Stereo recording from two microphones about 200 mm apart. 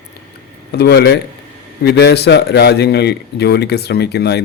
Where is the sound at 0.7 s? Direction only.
55° left (ahead or behind).